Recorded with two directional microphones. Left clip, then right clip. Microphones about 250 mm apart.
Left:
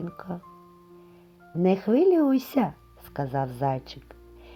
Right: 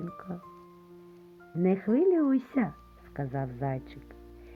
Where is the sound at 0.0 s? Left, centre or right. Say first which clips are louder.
Left 4 dB; left.